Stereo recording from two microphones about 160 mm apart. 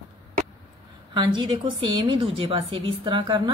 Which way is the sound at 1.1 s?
30° right (ahead or behind).